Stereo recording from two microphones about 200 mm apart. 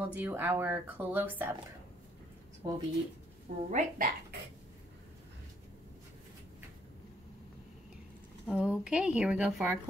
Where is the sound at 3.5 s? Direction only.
40° right (ahead or behind).